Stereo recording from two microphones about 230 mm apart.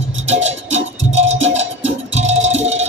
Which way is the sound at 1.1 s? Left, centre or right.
Right.